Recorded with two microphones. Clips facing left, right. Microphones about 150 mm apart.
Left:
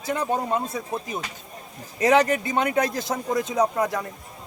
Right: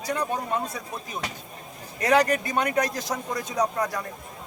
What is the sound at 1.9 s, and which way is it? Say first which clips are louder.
A man's voice: left 2 dB; 20° left (ahead or behind).